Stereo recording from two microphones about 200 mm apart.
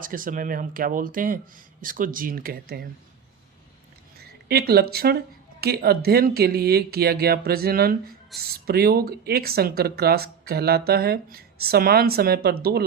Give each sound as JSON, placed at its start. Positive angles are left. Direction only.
{"t": 0.0, "sound": "speech", "side_deg": -45}
{"t": 4.2, "sound": "speech", "side_deg": -50}